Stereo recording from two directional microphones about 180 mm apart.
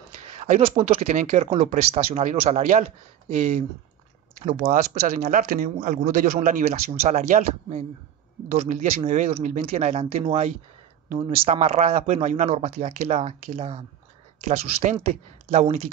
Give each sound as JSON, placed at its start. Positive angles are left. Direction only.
{"t": 0.6, "sound": "speech", "side_deg": -35}
{"t": 14.4, "sound": "speech", "side_deg": -45}